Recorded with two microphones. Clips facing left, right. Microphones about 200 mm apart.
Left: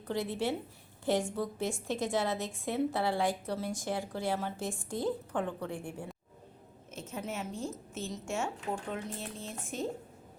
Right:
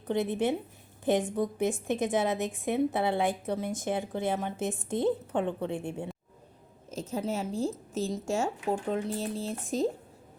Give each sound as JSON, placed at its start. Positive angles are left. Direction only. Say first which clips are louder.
{"t": 0.1, "sound": "a woman's voice", "louder": "right 5 dB", "side_deg": -20}
{"t": 6.9, "sound": "a woman's voice", "louder": "right 7 dB", "side_deg": -35}